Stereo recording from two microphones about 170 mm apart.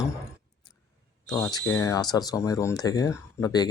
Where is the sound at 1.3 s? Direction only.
20° left (ahead or behind).